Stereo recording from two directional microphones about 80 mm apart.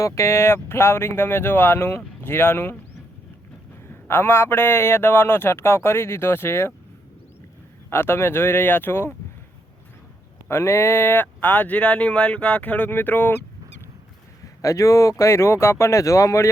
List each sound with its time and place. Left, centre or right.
0.0 s speech: left
4.1 s speech: left
7.9 s speech: left
10.5 s speech: left
14.4 s speech: left